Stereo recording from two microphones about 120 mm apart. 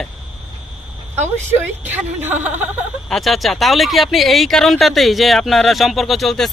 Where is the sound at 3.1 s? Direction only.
Centre (ahead or behind).